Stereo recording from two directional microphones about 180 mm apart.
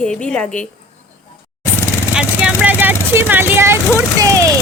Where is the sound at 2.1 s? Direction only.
5° right (ahead or behind).